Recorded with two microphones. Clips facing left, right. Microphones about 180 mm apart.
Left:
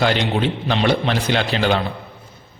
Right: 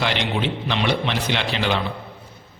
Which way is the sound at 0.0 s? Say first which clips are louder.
Left 5 dB; 45° left (ahead or behind).